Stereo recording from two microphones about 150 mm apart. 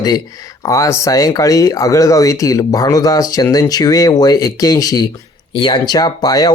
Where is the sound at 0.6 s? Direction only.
20° left (ahead or behind).